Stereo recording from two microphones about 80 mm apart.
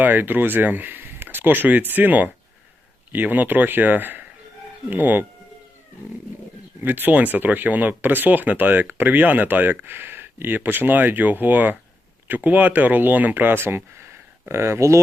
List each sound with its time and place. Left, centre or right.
0.0 s speech: right
6.8 s speech: right